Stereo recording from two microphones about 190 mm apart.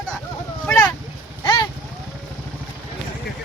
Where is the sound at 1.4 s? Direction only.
20° left (ahead or behind).